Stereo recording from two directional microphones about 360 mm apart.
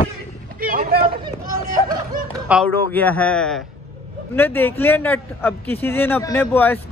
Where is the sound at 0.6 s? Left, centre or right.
Right.